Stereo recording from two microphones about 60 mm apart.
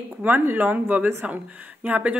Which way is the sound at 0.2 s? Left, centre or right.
Right.